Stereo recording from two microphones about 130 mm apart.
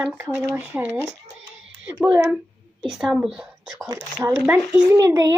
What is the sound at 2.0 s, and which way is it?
Speech, 15° right (ahead or behind).